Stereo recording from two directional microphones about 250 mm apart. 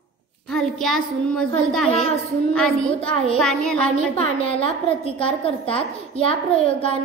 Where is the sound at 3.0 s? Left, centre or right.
Left.